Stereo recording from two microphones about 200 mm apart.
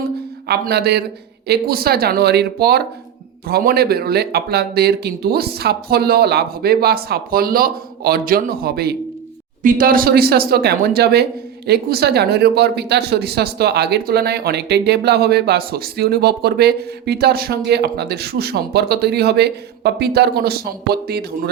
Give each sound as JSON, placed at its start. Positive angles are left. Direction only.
{"t": 0.4, "sound": "speech", "side_deg": -55}